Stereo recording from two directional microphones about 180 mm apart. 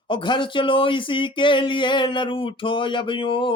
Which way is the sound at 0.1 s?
25° left (ahead or behind).